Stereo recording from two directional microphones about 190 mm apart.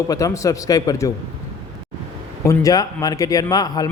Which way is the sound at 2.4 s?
15° left (ahead or behind).